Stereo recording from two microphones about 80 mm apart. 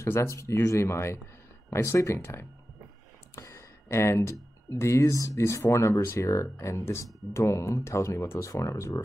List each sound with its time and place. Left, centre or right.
0.0 s speech: left